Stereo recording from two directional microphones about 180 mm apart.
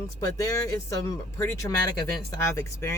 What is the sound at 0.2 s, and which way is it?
Speech, 15° left (ahead or behind).